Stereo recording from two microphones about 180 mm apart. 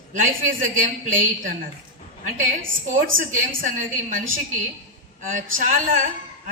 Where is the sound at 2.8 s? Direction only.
50° right (ahead or behind).